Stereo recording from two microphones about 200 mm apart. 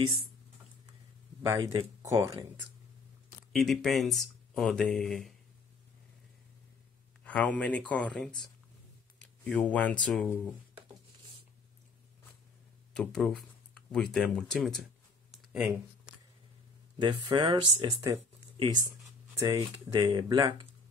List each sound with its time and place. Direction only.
1.4 s speech: 15° right (ahead or behind)
3.5 s speech: centre (ahead or behind)
7.2 s speech: 5° left (ahead or behind)
9.4 s speech: 5° left (ahead or behind)
12.9 s speech: 5° left (ahead or behind)
15.3 s a sound: 5° right (ahead or behind)
17.0 s speech: 25° right (ahead or behind)